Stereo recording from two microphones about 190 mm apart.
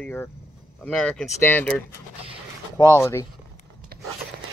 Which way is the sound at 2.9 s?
15° left (ahead or behind).